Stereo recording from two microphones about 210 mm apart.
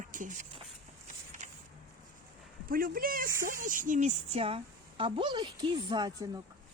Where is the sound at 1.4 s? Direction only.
35° right (ahead or behind).